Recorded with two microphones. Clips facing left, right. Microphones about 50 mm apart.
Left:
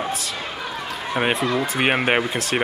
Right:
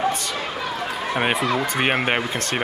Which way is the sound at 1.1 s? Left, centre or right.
Centre.